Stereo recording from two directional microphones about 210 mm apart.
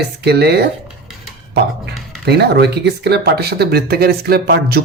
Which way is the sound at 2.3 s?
50° right (ahead or behind).